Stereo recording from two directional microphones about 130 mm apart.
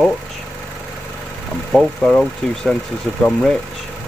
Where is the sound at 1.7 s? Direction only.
10° left (ahead or behind).